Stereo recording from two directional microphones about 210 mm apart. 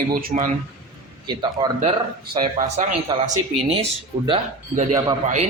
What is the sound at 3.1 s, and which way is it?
Speech, 20° right (ahead or behind).